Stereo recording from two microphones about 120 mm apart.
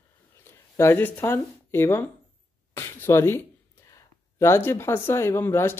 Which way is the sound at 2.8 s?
20° left (ahead or behind).